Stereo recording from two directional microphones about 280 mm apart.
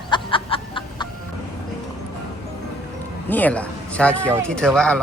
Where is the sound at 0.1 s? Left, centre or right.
Centre.